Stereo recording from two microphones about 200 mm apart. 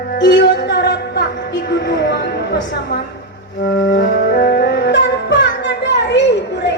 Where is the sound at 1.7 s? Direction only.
60° left (ahead or behind).